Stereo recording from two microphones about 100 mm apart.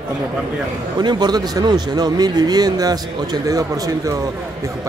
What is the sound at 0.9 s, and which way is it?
Speech, 45° right (ahead or behind).